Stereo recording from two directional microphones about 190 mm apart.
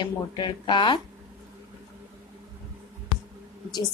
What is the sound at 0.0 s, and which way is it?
A woman's voice, 25° left (ahead or behind).